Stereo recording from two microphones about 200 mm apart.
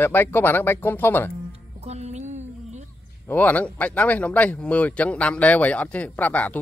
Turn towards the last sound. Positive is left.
turn(degrees=5)  # may be behind; listen again after turning